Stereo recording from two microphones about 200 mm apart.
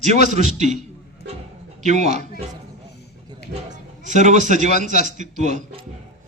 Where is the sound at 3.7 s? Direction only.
35° right (ahead or behind).